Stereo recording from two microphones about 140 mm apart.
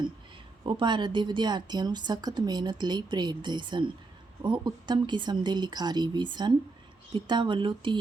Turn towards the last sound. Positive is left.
turn(degrees=-35)  # may be behind; listen again after turning